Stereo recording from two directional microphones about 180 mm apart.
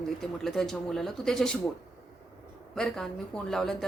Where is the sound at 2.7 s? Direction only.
5° left (ahead or behind).